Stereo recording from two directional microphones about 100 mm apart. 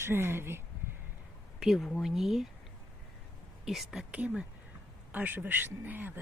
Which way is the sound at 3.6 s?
5° right (ahead or behind).